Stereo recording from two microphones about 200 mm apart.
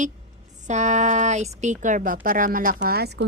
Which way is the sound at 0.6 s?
35° right (ahead or behind).